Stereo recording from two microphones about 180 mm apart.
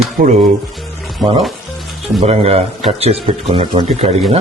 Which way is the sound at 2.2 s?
35° right (ahead or behind).